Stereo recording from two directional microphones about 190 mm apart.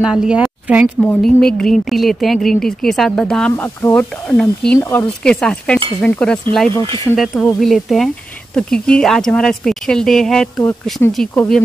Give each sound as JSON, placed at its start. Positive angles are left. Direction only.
{"t": 0.0, "sound": "a woman's voice", "side_deg": -5}
{"t": 4.7, "sound": "speech", "side_deg": 15}
{"t": 5.2, "sound": "speech", "side_deg": 5}